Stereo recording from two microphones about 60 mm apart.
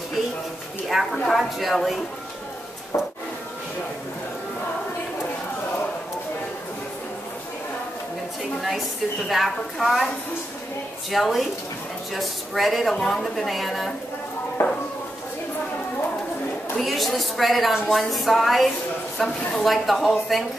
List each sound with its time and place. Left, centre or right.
1.0 s a woman's voice: centre
8.5 s a woman's voice: centre
11.1 s a woman's voice: centre
14.6 s a sound: left
16.7 s a woman's voice: centre